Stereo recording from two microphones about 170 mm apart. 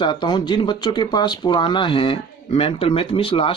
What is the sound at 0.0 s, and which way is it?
Speech, 25° left (ahead or behind).